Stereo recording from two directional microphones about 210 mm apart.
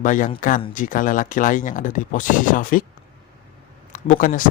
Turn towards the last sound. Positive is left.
turn(degrees=40)  # may be behind; listen again after turning